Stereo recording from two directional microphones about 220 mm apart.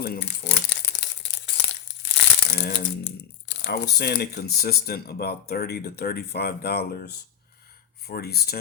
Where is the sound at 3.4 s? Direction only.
50° left (ahead or behind).